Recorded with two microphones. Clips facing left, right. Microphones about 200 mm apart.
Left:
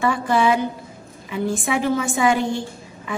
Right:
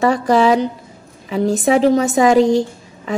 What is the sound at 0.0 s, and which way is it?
A woman's voice, 40° right (ahead or behind).